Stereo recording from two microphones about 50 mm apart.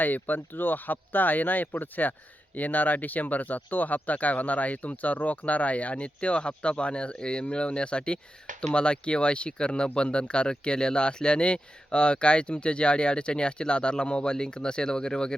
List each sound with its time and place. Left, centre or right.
0.0 s speech: left; by 15.4 s centre